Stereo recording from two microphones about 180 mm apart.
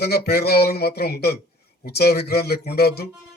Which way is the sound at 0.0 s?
60° left (ahead or behind).